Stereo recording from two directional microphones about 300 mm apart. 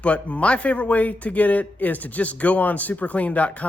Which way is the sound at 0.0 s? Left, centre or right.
Centre.